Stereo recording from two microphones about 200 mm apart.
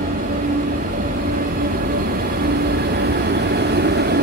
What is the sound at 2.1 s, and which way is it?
Vehicle, 50° right (ahead or behind).